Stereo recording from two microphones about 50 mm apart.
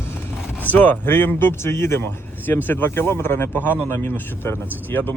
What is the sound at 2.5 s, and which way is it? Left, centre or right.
Speech, left.